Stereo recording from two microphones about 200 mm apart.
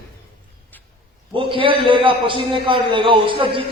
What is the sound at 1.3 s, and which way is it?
A man's voice, 25° right (ahead or behind).